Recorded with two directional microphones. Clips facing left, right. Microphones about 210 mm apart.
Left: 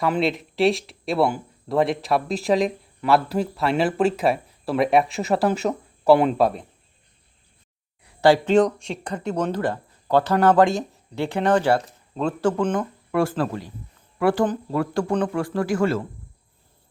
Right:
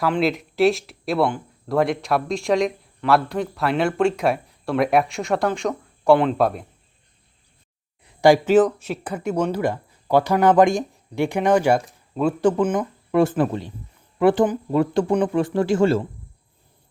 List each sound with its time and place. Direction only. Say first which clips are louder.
0.0 s speech: right 1 dB; centre (ahead or behind)
8.0 s speech: right 2 dB; 15° right (ahead or behind)
14.4 s speech: right 3 dB; 10° right (ahead or behind)
14.8 s a man's voice: right 4 dB; 20° right (ahead or behind)